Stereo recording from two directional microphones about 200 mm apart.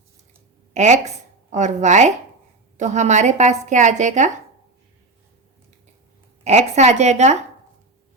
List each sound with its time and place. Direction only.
0.7 s speech: 35° right (ahead or behind)
6.4 s speech: 35° right (ahead or behind)